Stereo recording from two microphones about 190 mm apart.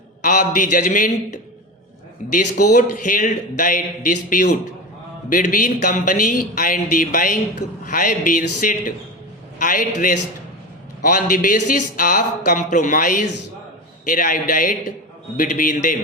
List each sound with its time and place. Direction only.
0.2 s speech: 45° left (ahead or behind)